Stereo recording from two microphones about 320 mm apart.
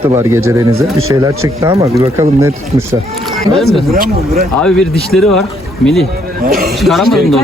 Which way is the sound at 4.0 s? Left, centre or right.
Right.